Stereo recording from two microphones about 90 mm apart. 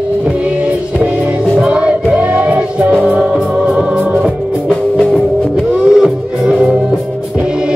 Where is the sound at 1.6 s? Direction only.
15° right (ahead or behind).